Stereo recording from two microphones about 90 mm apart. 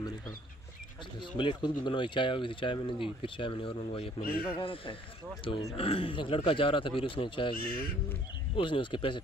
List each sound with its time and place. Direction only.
1.4 s speech: 65° left (ahead or behind)
5.5 s speech: 90° left; by 7.5 s 70° left (ahead or behind)
8.5 s speech: 70° left (ahead or behind)